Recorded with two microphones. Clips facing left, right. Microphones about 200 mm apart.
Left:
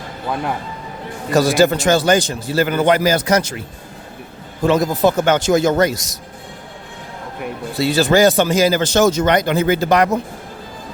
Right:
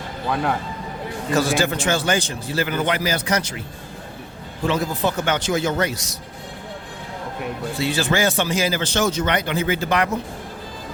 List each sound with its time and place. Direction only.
1.3 s speech: 40° left (ahead or behind)
4.6 s a man's voice: 40° left (ahead or behind)
7.8 s speech: 40° left (ahead or behind)